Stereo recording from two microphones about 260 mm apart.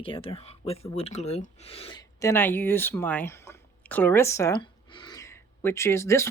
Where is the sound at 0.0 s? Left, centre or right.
Centre.